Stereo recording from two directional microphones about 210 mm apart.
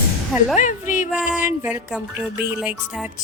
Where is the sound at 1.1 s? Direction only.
5° right (ahead or behind).